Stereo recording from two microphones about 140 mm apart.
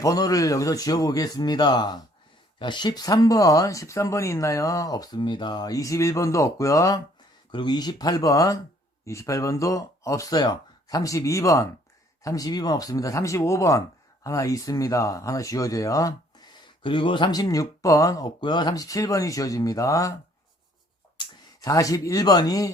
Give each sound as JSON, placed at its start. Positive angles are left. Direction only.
{"t": 0.0, "sound": "speech", "side_deg": 25}
{"t": 21.2, "sound": "speech", "side_deg": 25}